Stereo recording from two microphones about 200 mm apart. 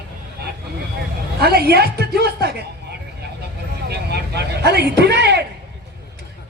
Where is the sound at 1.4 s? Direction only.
50° right (ahead or behind).